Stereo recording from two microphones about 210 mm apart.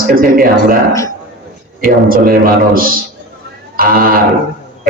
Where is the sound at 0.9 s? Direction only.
15° left (ahead or behind).